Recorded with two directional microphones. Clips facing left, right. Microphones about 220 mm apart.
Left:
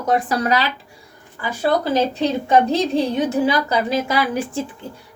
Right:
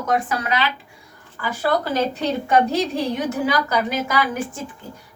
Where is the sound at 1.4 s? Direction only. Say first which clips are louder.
Left 2 dB; 20° left (ahead or behind).